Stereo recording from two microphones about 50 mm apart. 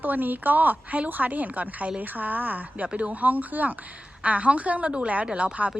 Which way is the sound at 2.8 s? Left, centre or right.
Right.